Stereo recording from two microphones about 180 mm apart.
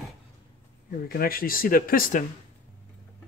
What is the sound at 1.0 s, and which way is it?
Speech, 55° left (ahead or behind).